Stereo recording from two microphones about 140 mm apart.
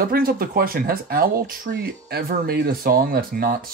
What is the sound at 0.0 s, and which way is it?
Speech, 90° right.